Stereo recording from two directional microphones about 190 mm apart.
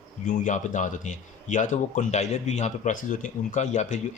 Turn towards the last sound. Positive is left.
turn(degrees=40)  # may be behind; listen again after turning